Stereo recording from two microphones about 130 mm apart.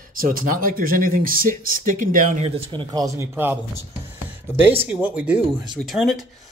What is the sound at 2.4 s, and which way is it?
Speech, 40° right (ahead or behind).